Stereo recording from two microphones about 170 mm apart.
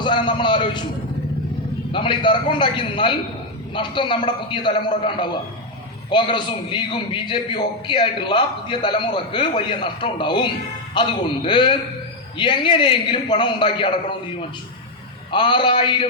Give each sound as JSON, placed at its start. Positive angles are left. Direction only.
{"t": 0.0, "sound": "a man's voice", "side_deg": 30}
{"t": 1.9, "sound": "a man's voice", "side_deg": 30}
{"t": 15.3, "sound": "a man's voice", "side_deg": 30}